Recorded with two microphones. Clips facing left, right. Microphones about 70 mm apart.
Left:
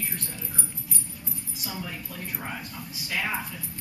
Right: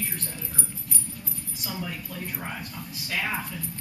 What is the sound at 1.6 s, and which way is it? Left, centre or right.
Speech, centre.